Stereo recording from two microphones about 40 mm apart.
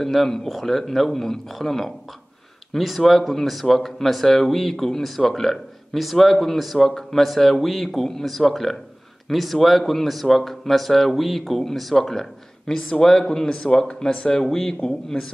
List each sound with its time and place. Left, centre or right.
0.0 s a man's voice: centre
12.7 s a man's voice: left
13.0 s a man's voice: centre